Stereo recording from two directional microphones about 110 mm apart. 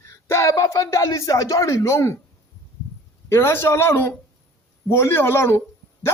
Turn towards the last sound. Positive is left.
turn(degrees=25)  # may be behind; listen again after turning